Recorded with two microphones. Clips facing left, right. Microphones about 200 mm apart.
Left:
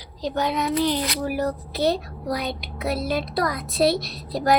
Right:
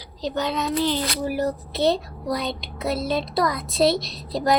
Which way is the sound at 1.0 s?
30° right (ahead or behind).